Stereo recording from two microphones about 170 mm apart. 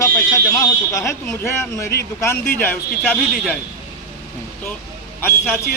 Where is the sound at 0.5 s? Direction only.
15° left (ahead or behind).